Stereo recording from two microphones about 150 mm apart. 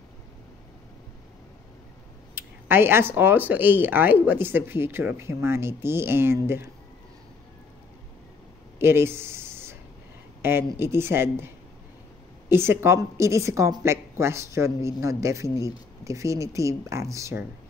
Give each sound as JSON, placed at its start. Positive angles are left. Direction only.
{"t": 2.3, "sound": "speech", "side_deg": -15}
{"t": 8.7, "sound": "a sound", "side_deg": -15}
{"t": 10.4, "sound": "speech", "side_deg": -15}